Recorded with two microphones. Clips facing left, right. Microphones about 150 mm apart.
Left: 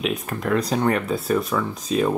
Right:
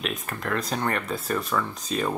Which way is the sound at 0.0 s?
Centre (ahead or behind).